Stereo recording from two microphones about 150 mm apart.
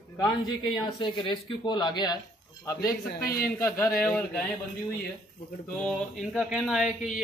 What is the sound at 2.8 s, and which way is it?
Speech, 85° left.